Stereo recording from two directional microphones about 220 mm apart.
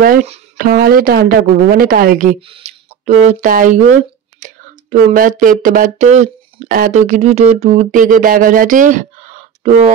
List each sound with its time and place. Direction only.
0.0 s a woman's voice: 40° right (ahead or behind)